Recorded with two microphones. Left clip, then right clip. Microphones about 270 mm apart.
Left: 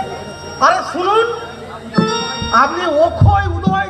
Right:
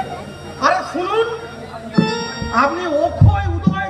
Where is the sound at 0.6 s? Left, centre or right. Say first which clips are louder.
Left 4 dB; centre.